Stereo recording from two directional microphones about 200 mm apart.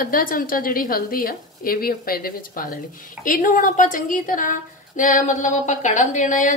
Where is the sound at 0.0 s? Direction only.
45° left (ahead or behind).